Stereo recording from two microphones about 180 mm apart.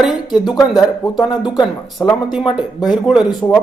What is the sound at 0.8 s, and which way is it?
Speech, 20° left (ahead or behind).